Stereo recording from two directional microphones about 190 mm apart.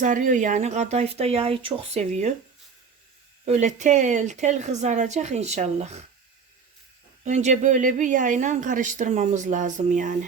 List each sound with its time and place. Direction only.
0.0 s a woman's voice: 40° right (ahead or behind)
3.4 s a woman's voice: 35° right (ahead or behind)
7.3 s a woman's voice: 40° right (ahead or behind)